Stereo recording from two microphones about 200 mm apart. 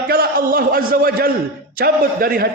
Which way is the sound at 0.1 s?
50° right (ahead or behind).